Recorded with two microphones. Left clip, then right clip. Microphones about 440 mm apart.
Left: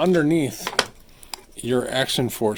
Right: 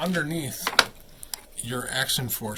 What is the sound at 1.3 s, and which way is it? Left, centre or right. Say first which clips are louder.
Speech: left 10 dB; centre.